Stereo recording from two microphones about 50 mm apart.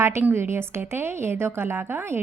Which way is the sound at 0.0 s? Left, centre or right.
Right.